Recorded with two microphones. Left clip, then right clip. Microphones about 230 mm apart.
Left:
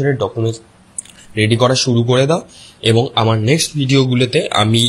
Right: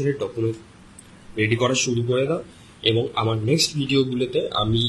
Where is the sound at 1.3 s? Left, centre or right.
Left.